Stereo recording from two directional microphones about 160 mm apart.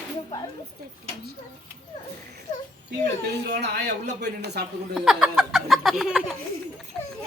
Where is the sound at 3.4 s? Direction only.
90° right.